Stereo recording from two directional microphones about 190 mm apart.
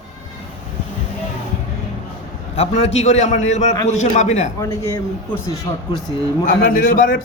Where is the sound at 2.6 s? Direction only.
35° left (ahead or behind).